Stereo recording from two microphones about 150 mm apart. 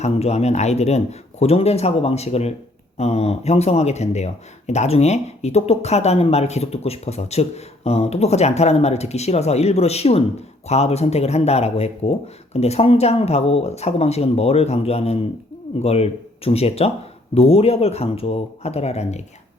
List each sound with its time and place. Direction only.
0.0 s speech: 45° left (ahead or behind)